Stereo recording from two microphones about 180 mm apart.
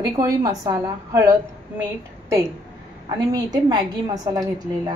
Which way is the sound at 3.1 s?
25° right (ahead or behind).